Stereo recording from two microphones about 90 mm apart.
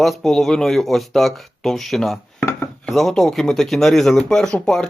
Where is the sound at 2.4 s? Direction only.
30° left (ahead or behind).